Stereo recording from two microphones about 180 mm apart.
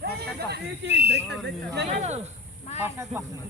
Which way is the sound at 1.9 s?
40° right (ahead or behind).